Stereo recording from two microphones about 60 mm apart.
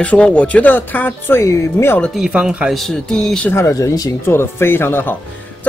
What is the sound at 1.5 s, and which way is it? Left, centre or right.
Speech, left.